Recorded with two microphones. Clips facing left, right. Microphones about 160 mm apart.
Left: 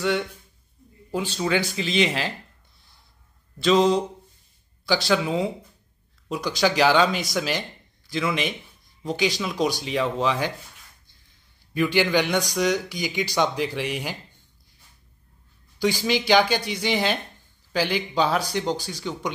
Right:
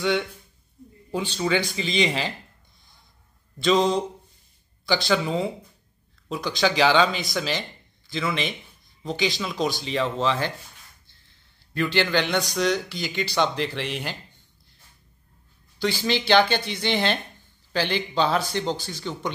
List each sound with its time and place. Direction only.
1.1 s speech: 5° left (ahead or behind)
3.5 s speech: 5° left (ahead or behind)
11.7 s speech: 10° left (ahead or behind)
15.8 s speech: 10° left (ahead or behind)